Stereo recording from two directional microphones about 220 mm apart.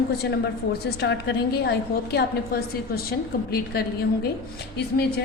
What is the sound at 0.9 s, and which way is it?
A woman's voice, 45° left (ahead or behind).